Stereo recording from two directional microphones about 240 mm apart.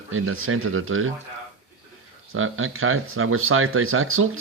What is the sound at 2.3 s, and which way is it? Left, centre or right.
Speech, right.